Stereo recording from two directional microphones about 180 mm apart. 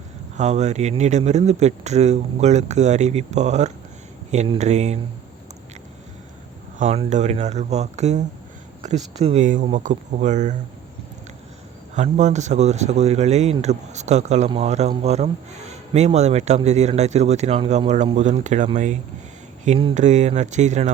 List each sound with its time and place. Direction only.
0.3 s speech: 40° right (ahead or behind)
6.7 s speech: 40° right (ahead or behind)
11.9 s speech: 40° right (ahead or behind)